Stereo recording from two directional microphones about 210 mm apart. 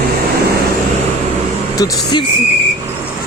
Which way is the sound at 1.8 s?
20° left (ahead or behind).